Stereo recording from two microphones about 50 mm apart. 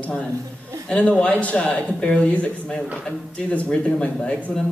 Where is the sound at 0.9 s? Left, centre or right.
Left.